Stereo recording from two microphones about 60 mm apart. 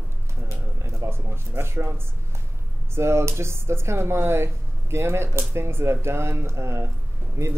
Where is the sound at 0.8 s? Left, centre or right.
Right.